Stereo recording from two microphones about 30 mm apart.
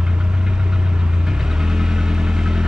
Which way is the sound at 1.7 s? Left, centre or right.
Centre.